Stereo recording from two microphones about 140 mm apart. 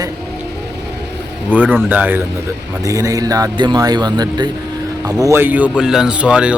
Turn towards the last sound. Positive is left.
turn(degrees=-10)  # may be behind; listen again after turning